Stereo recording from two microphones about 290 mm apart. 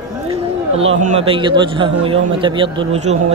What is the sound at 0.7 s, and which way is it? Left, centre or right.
A man's voice, centre.